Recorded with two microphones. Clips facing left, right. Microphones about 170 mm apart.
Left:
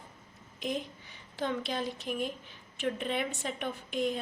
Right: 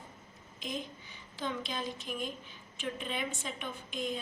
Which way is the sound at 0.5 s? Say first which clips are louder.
Left 5 dB; 65° left (ahead or behind).